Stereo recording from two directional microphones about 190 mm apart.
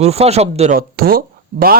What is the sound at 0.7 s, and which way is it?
Speech, 50° right (ahead or behind).